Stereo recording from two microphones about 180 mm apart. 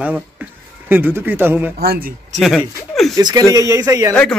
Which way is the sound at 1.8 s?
55° right (ahead or behind).